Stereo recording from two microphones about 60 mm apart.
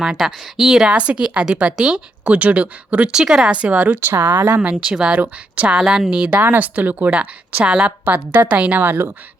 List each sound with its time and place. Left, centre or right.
0.0 s a woman's voice: centre
0.9 s a woman's voice: centre
2.2 s a woman's voice: right
3.2 s a woman's voice: centre
4.1 s speech: right
4.7 s a woman's voice: centre
6.4 s a woman's voice: right
8.8 s speech: right